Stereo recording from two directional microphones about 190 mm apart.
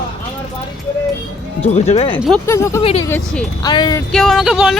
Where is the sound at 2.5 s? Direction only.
15° left (ahead or behind).